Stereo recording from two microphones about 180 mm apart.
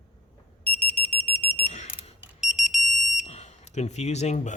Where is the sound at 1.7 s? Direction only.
35° left (ahead or behind).